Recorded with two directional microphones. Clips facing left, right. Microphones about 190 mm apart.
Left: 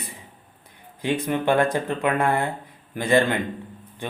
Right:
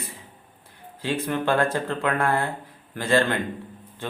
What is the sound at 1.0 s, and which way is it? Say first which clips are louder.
Speech: left 2 dB; 15° left (ahead or behind).